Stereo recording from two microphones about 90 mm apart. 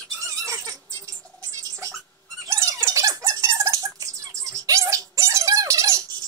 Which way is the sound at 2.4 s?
35° right (ahead or behind).